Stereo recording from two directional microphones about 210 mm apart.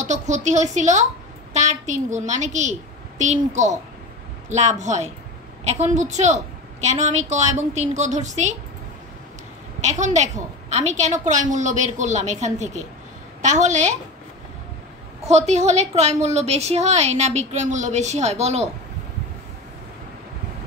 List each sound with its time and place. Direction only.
0.0 s a woman's voice: 35° right (ahead or behind)
9.8 s a woman's voice: 35° right (ahead or behind)
15.2 s a woman's voice: 30° right (ahead or behind)